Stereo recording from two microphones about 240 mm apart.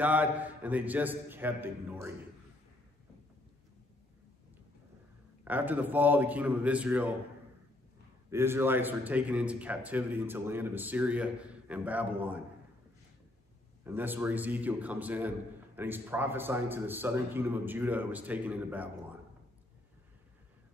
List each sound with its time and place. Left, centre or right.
0.0 s a man's voice: centre
5.4 s a man's voice: centre
8.3 s a man's voice: centre
13.8 s a man's voice: centre